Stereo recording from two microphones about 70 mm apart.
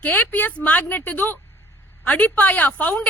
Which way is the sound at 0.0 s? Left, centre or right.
Left.